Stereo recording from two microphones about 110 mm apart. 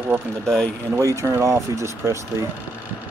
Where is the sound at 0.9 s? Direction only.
25° right (ahead or behind).